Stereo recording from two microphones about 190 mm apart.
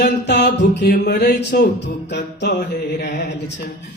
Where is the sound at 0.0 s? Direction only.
60° left (ahead or behind).